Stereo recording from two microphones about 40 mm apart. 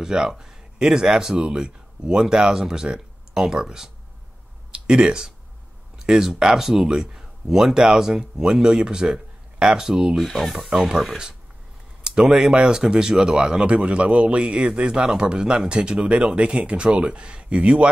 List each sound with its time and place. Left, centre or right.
0.0 s speech: centre
10.2 s speech: centre
10.5 s speech: centre
12.3 s speech: centre
13.7 s speech: right